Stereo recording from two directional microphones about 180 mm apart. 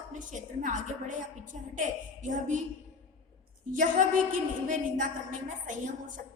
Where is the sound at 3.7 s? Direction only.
45° right (ahead or behind).